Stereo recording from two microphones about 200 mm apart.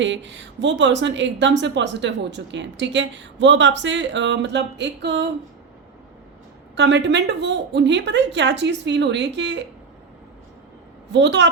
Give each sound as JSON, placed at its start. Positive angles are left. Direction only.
{"t": 0.0, "sound": "speech", "side_deg": -65}
{"t": 6.7, "sound": "speech", "side_deg": -60}
{"t": 11.1, "sound": "speech", "side_deg": -60}